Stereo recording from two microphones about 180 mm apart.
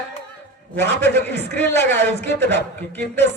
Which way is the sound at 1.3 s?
70° right (ahead or behind).